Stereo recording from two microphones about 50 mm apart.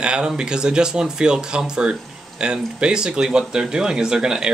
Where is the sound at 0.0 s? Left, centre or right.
Centre.